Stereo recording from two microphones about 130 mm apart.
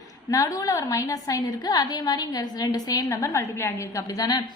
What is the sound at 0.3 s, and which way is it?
A woman's voice, 25° left (ahead or behind).